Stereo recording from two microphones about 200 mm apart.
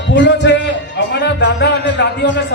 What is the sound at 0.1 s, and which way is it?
Music, 60° left (ahead or behind).